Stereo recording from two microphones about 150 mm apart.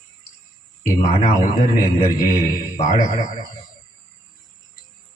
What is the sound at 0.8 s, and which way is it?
A man's voice, 55° left (ahead or behind).